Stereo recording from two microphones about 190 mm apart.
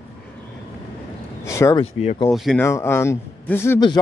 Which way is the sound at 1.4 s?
15° left (ahead or behind).